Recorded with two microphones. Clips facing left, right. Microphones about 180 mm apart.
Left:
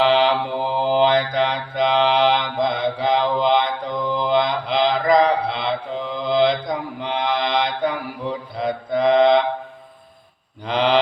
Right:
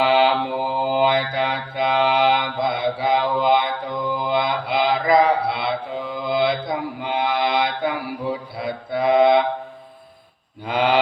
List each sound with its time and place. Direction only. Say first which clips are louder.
0.0 s mantra: even; 5° right (ahead or behind)
10.7 s mantra: left 1 dB; 5° right (ahead or behind)